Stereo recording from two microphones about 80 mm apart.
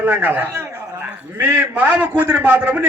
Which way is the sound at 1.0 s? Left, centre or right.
Right.